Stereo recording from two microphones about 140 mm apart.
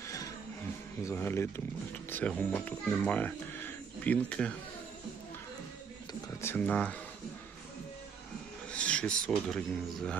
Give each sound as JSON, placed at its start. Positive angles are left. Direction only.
{"t": 1.0, "sound": "a child's voice", "side_deg": 15}
{"t": 6.4, "sound": "speech", "side_deg": 15}
{"t": 8.7, "sound": "speech", "side_deg": 10}